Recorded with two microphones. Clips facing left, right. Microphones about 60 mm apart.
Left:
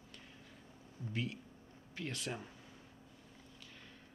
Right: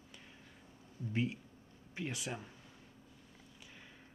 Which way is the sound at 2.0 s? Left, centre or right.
Centre.